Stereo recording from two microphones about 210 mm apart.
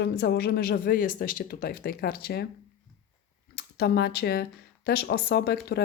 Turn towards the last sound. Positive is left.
turn(degrees=50)  # may be behind; listen again after turning